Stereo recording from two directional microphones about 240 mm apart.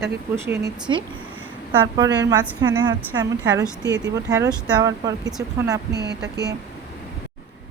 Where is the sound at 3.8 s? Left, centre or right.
Right.